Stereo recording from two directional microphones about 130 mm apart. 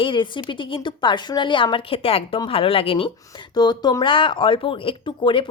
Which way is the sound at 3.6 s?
30° left (ahead or behind).